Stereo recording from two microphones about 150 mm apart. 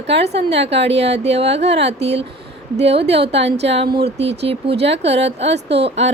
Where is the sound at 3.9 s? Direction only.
90° right.